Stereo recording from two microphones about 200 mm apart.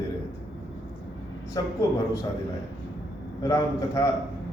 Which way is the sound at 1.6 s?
20° left (ahead or behind).